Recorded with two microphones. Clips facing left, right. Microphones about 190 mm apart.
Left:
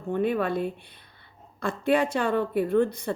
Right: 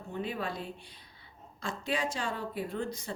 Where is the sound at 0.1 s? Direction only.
60° left (ahead or behind).